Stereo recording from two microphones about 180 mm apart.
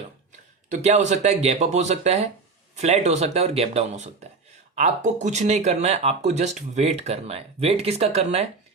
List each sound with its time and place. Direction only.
0.7 s speech: 40° right (ahead or behind)